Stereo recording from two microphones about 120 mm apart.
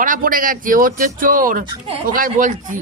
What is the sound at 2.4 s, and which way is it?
Speech, 90° right.